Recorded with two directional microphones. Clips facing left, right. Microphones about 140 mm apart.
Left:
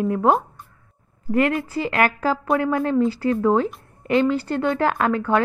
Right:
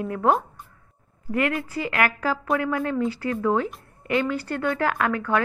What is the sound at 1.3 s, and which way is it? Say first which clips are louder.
A woman's voice: left 4 dB; 30° left (ahead or behind).